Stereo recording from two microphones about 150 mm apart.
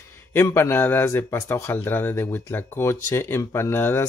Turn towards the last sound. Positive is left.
turn(degrees=15)  # may be behind; listen again after turning